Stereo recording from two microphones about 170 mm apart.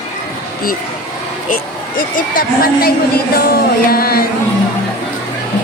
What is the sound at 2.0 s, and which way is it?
A woman's voice, 55° left (ahead or behind).